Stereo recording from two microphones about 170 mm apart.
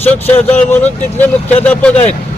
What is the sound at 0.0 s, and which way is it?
A man's voice, 10° left (ahead or behind).